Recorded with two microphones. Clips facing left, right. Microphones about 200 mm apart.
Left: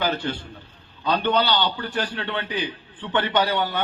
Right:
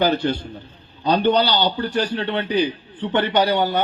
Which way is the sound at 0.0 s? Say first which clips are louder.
Right 6 dB; 40° right (ahead or behind).